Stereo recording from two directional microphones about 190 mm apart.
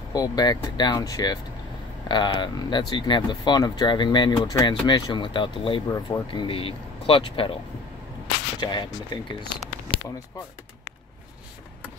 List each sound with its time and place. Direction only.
0.1 s speech: 20° left (ahead or behind)
8.5 s speech: 25° left (ahead or behind)